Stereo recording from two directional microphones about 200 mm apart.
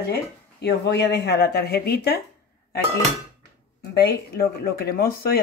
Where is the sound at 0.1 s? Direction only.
55° left (ahead or behind).